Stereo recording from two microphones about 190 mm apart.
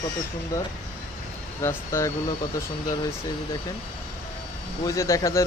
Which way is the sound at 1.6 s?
15° left (ahead or behind).